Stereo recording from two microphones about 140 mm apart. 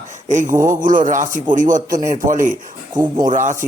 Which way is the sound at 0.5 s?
20° right (ahead or behind).